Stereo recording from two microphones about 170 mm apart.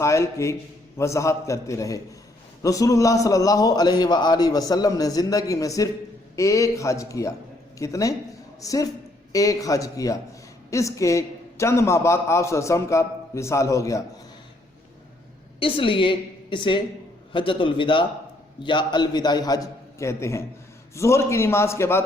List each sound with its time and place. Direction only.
0.0 s a man's voice: 15° left (ahead or behind)
15.6 s a man's voice: 30° left (ahead or behind); by 22.0 s 15° left (ahead or behind)